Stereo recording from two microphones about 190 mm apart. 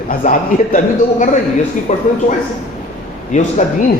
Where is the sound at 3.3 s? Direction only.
40° left (ahead or behind).